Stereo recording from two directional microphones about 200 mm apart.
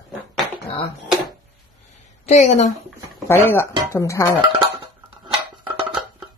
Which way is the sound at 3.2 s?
10° left (ahead or behind).